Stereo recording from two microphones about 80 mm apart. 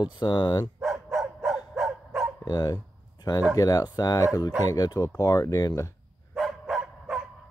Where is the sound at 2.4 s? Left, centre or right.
Left.